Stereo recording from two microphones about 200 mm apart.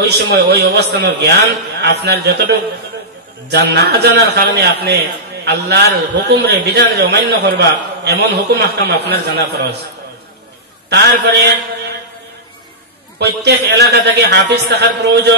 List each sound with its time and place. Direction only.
0.0 s a man's voice: 55° right (ahead or behind)
10.9 s a man's voice: 60° right (ahead or behind)
13.2 s a man's voice: 55° right (ahead or behind)